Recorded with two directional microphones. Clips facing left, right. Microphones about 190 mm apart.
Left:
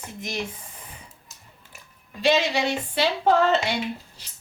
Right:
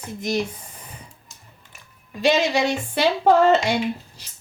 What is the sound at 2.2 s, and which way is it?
Speech, 45° right (ahead or behind).